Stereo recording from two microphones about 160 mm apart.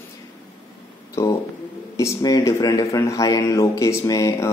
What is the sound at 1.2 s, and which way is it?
Speech, 15° left (ahead or behind).